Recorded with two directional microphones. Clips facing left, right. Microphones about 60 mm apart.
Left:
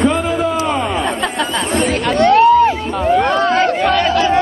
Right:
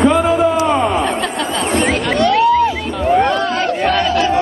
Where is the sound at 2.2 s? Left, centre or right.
Left.